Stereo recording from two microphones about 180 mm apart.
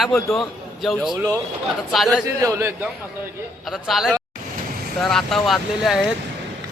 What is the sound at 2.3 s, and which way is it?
Mantra, 15° right (ahead or behind).